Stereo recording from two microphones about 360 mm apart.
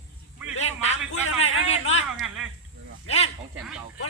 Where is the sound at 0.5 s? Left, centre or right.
Centre.